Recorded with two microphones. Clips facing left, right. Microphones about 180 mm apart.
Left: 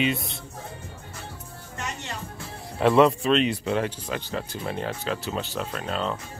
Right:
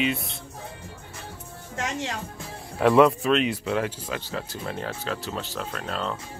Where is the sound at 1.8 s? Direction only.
90° right.